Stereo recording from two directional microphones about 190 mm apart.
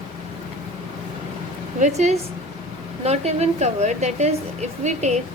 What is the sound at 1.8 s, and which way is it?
A woman's voice, 40° right (ahead or behind).